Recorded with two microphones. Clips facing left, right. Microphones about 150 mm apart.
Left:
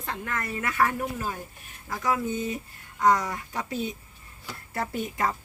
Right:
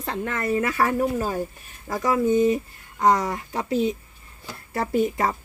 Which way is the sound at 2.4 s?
30° right (ahead or behind).